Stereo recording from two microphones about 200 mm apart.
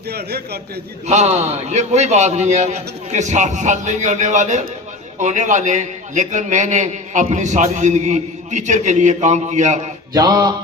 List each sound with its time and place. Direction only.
0.1 s a man's voice: 55° right (ahead or behind)
1.0 s a man's voice: 35° right (ahead or behind)
10.2 s a sound: 20° right (ahead or behind)